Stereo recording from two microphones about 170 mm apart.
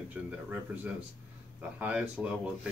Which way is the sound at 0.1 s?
10° right (ahead or behind).